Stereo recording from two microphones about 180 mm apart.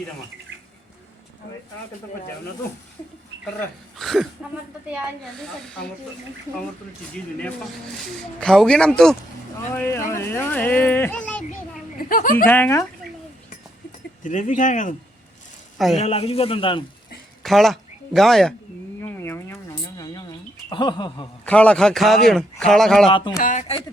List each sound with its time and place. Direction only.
3.9 s speech: centre (ahead or behind)
8.0 s speech: centre (ahead or behind)
11.9 s speech: 50° left (ahead or behind)
12.5 s speech: 10° left (ahead or behind)
14.3 s speech: 45° left (ahead or behind)
16.0 s speech: 35° left (ahead or behind)
17.4 s speech: centre (ahead or behind)
19.0 s a sound: 15° left (ahead or behind)
20.7 s speech: 25° left (ahead or behind)
21.4 s speech: 5° left (ahead or behind)
23.0 s speech: 25° left (ahead or behind)
23.4 s a sound: 45° left (ahead or behind)